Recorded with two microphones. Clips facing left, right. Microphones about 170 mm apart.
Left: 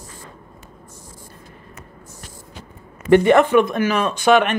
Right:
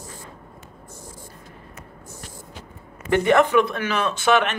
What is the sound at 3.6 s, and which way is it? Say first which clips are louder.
Speech: left 5 dB; 15° left (ahead or behind).